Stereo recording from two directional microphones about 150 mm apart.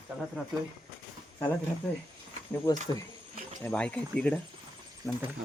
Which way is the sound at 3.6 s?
5° left (ahead or behind).